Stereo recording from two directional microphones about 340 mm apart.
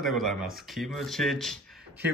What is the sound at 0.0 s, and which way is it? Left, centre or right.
A man's voice, centre.